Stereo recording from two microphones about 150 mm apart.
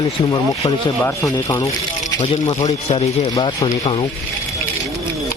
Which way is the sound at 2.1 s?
30° left (ahead or behind).